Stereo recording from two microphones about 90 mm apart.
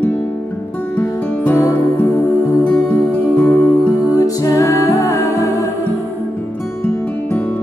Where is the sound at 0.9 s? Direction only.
20° left (ahead or behind).